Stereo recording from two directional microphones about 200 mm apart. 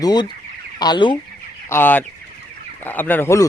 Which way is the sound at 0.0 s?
20° left (ahead or behind).